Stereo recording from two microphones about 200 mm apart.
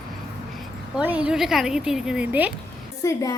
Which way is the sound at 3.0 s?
15° left (ahead or behind).